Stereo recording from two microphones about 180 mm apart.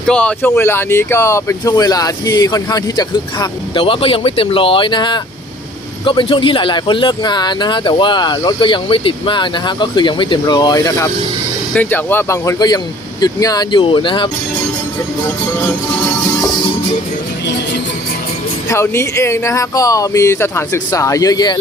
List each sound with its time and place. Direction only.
0.1 s speech: 5° left (ahead or behind); by 14.3 s 25° left (ahead or behind)
18.7 s speech: 15° left (ahead or behind)